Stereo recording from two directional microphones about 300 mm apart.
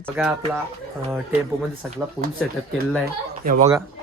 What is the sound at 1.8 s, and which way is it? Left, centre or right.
Speech, centre.